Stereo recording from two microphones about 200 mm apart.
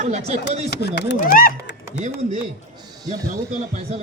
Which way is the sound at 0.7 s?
55° left (ahead or behind).